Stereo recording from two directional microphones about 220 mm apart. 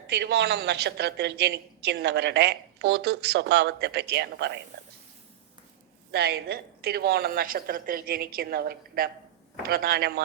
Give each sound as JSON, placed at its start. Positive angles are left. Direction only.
{"t": 0.1, "sound": "a woman's voice", "side_deg": -50}
{"t": 6.1, "sound": "a woman's voice", "side_deg": -45}